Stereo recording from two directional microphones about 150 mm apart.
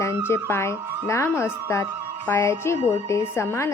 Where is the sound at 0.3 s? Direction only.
15° left (ahead or behind).